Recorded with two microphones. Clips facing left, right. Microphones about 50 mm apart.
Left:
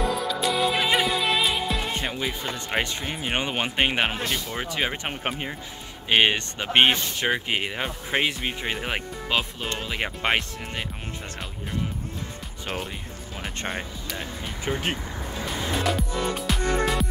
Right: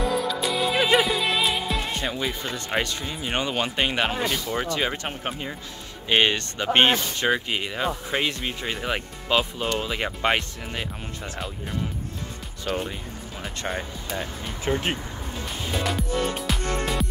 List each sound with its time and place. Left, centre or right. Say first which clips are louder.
0.0 s music: right 1 dB; centre
2.0 s speech: right 1 dB; centre
4.3 s speech: right 3 dB; centre
7.4 s speech: right 1 dB; left
12.7 s speech: right 4 dB; left
14.1 s speech: right 3 dB; centre
15.4 s music: left 2 dB; centre